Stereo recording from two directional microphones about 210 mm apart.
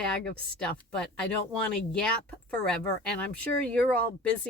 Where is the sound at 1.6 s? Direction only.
5° left (ahead or behind).